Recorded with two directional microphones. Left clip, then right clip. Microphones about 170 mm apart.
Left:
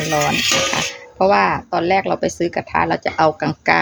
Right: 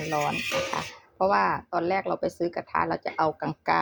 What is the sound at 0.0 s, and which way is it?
Speech, 10° left (ahead or behind).